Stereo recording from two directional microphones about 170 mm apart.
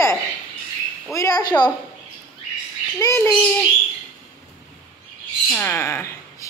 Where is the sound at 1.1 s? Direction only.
20° left (ahead or behind).